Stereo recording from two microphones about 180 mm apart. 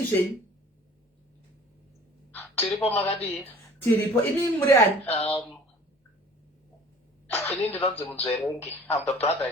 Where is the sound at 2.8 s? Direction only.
35° left (ahead or behind).